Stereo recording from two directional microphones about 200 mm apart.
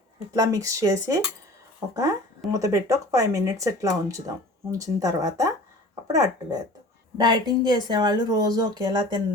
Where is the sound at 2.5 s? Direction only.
15° right (ahead or behind).